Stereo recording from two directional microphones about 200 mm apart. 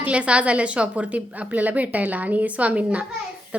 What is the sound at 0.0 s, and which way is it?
A woman's voice, 5° right (ahead or behind).